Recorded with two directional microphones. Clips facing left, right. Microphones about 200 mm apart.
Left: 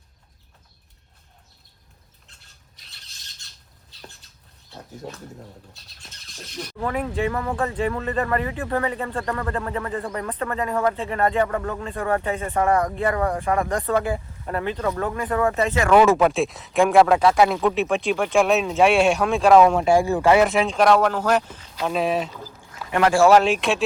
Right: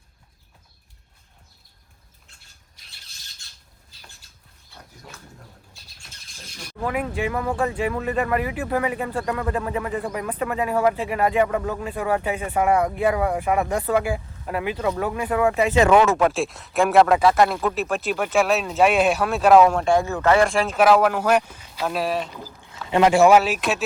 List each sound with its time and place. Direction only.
5.7 s speech: centre (ahead or behind)
16.1 s speech: centre (ahead or behind)
22.9 s speech: 20° right (ahead or behind)
23.4 s speech: 5° right (ahead or behind)